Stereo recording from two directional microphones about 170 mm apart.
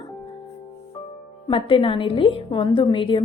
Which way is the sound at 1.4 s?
30° left (ahead or behind).